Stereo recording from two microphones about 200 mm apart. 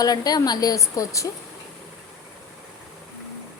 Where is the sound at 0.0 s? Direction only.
20° left (ahead or behind).